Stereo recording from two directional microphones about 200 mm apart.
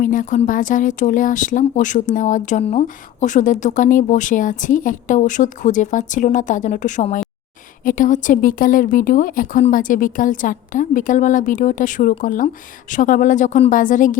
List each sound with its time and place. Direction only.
0.0 s speech: 40° left (ahead or behind)